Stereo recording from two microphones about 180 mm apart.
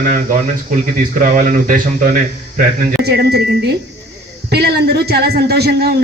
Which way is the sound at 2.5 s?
65° right (ahead or behind).